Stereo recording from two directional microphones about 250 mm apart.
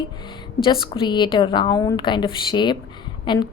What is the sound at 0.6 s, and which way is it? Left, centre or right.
A woman's voice, centre.